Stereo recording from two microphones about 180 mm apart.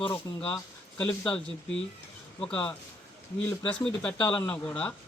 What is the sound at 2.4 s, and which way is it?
Speech, 10° left (ahead or behind).